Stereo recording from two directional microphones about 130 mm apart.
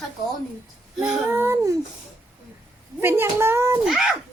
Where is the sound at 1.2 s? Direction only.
20° right (ahead or behind).